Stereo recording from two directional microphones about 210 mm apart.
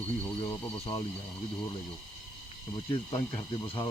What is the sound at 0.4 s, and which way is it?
Speech, 20° left (ahead or behind).